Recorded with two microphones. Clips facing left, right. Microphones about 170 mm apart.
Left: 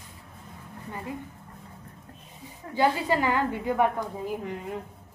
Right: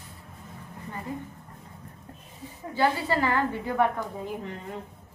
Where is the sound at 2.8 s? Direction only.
15° left (ahead or behind).